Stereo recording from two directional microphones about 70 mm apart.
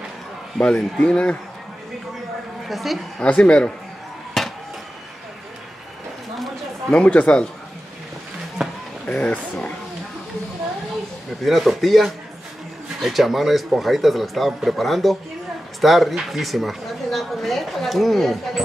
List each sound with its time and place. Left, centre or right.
0.6 s speech: centre
2.7 s a woman's voice: centre
3.2 s speech: centre
4.4 s chop: centre
6.9 s speech: centre
8.6 s a sound: centre
9.0 s speech: left
11.4 s a woman's voice: centre